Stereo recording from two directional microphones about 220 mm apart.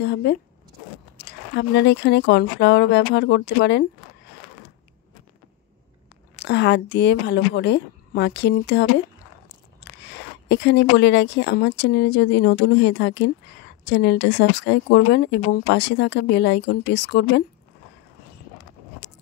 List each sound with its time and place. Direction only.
0.0 s speech: 50° left (ahead or behind)
6.3 s speech: 50° left (ahead or behind)